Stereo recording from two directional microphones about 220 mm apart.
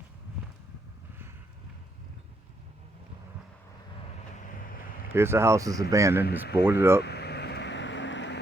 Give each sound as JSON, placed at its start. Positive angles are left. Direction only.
{"t": 5.1, "sound": "speech", "side_deg": -10}
{"t": 7.0, "sound": "vehicle", "side_deg": 50}